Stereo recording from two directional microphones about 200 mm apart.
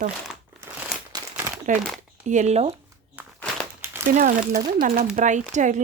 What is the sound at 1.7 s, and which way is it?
Speech, 40° right (ahead or behind).